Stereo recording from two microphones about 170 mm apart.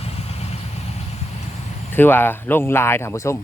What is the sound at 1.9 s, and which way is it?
Speech, 10° left (ahead or behind).